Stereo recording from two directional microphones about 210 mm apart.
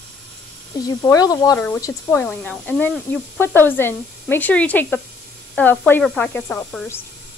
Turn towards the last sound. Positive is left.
turn(degrees=10)  # may be behind; listen again after turning